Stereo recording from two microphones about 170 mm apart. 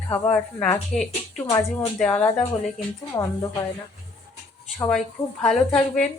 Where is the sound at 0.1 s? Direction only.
5° left (ahead or behind).